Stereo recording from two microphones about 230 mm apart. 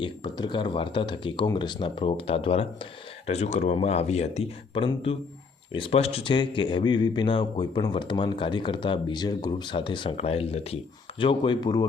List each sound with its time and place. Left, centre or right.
0.0 s speech: centre